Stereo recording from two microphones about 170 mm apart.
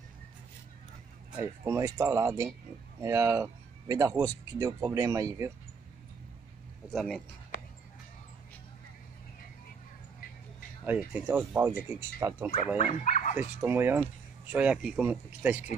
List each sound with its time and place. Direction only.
1.3 s speech: 15° right (ahead or behind)
6.9 s speech: centre (ahead or behind)
10.9 s speech: 10° right (ahead or behind)
12.7 s speech: 45° left (ahead or behind)
13.4 s speech: 10° right (ahead or behind)